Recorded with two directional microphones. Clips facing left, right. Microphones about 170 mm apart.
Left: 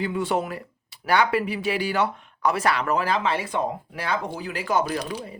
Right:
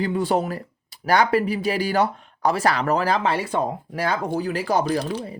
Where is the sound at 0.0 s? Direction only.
35° right (ahead or behind).